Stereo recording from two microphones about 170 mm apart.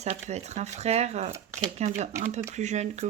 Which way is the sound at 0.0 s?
40° right (ahead or behind).